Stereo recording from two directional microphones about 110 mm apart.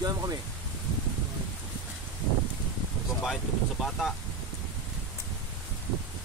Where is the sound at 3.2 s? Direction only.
Centre (ahead or behind).